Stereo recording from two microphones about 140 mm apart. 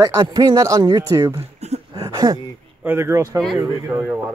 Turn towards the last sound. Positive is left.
turn(degrees=-15)  # may be behind; listen again after turning